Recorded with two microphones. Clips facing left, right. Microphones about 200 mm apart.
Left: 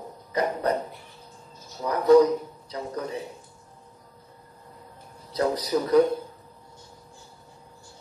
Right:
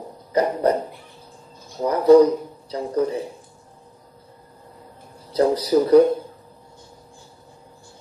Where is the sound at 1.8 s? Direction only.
30° right (ahead or behind).